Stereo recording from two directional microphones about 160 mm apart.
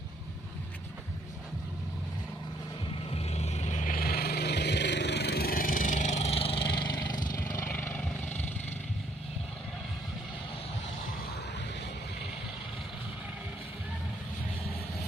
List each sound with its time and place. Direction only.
3.1 s vehicle: 40° left (ahead or behind)
7.3 s vehicle: 15° left (ahead or behind)